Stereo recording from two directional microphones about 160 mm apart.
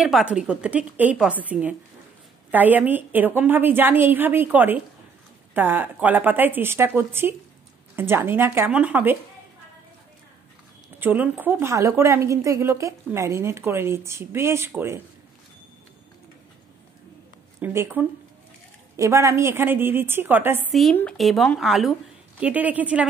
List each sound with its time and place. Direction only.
0.0 s a woman's voice: 5° right (ahead or behind)
11.0 s a woman's voice: 10° right (ahead or behind)
17.6 s a woman's voice: 15° right (ahead or behind)
20.9 s a woman's voice: 5° left (ahead or behind)